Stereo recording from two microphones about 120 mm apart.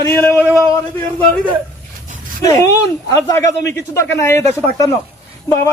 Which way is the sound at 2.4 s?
30° left (ahead or behind).